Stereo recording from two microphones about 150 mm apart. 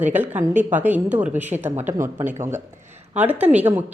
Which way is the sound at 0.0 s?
10° right (ahead or behind).